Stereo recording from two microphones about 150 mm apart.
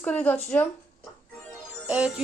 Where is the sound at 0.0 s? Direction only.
10° left (ahead or behind).